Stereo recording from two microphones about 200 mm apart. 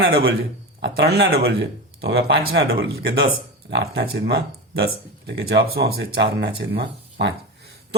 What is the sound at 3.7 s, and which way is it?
Speech, 55° right (ahead or behind).